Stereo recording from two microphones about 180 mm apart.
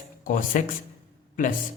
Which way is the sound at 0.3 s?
45° left (ahead or behind).